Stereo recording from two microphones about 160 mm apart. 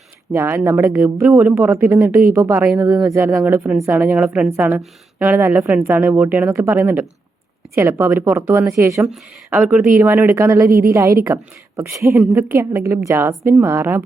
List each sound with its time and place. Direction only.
0.3 s speech: 15° right (ahead or behind)
9.5 s a woman's voice: 5° right (ahead or behind)